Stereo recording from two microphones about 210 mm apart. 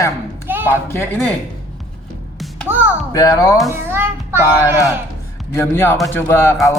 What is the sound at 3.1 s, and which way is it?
Speech, 15° left (ahead or behind).